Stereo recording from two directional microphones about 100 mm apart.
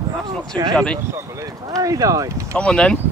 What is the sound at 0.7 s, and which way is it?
Speech, 10° left (ahead or behind).